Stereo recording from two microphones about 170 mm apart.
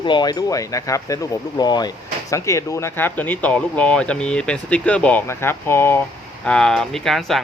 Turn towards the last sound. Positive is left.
turn(degrees=0)  # may be behind; listen again after turning